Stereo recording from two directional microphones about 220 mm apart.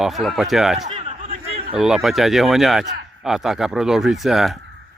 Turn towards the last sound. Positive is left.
turn(degrees=0)  # may be behind; listen again after turning